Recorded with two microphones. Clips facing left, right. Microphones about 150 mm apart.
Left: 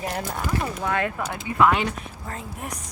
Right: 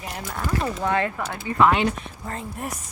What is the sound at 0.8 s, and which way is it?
Speech, centre (ahead or behind).